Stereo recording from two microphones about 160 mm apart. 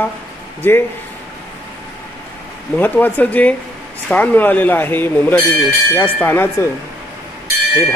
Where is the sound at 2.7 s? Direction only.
10° left (ahead or behind).